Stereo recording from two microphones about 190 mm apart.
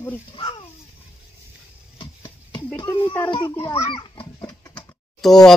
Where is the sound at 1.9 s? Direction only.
25° left (ahead or behind).